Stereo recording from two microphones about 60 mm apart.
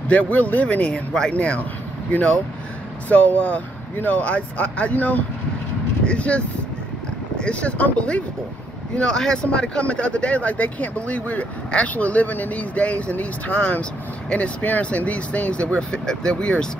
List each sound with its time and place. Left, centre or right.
0.1 s speech: left